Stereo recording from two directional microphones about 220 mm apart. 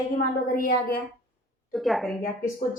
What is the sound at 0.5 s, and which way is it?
Speech, 40° left (ahead or behind).